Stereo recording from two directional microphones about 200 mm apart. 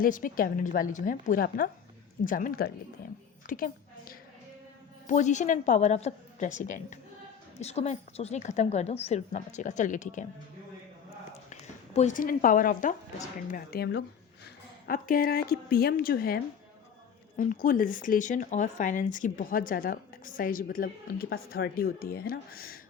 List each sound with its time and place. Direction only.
0.0 s speech: 45° left (ahead or behind)
3.4 s a sound: 45° left (ahead or behind)
5.0 s a woman's voice: 35° left (ahead or behind)
11.9 s speech: 40° left (ahead or behind)